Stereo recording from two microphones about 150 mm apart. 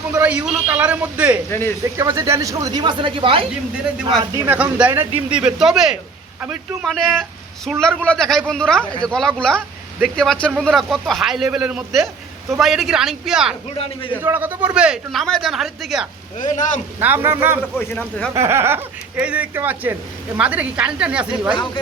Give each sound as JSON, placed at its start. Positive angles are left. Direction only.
{"t": 0.1, "sound": "speech", "side_deg": -10}
{"t": 1.5, "sound": "speech", "side_deg": 15}
{"t": 1.8, "sound": "speech", "side_deg": -20}
{"t": 4.4, "sound": "a man's voice", "side_deg": -10}
{"t": 13.7, "sound": "a man's voice", "side_deg": 40}
{"t": 14.2, "sound": "a man's voice", "side_deg": -15}
{"t": 16.4, "sound": "speech", "side_deg": 55}
{"t": 17.0, "sound": "speech", "side_deg": -15}
{"t": 17.6, "sound": "speech", "side_deg": 10}
{"t": 18.3, "sound": "speech", "side_deg": -15}